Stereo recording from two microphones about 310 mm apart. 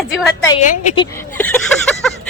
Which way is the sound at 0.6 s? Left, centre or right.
Centre.